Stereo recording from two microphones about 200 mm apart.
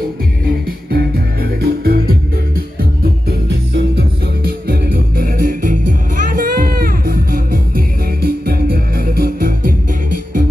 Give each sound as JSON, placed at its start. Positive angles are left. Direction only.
{"t": 0.8, "sound": "music", "side_deg": -50}